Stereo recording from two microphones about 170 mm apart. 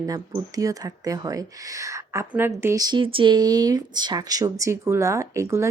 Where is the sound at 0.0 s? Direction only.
20° right (ahead or behind).